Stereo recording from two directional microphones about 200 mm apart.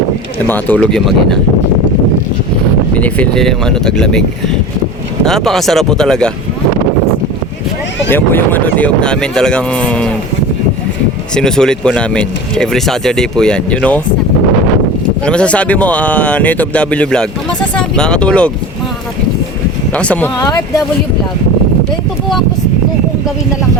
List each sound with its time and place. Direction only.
0.4 s speech: 10° left (ahead or behind)
2.9 s speech: 5° left (ahead or behind)
5.2 s speech: centre (ahead or behind)
8.1 s speech: 10° left (ahead or behind)
11.3 s speech: 5° left (ahead or behind)
15.2 s speech: 5° left (ahead or behind)
19.9 s speech: 5° left (ahead or behind)
20.4 s speech: 20° left (ahead or behind)